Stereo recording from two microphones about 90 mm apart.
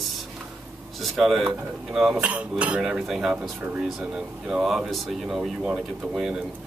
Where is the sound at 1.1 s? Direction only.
5° right (ahead or behind).